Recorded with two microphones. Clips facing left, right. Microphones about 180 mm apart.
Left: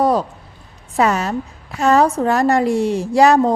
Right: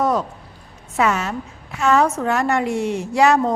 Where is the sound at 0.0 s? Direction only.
35° left (ahead or behind).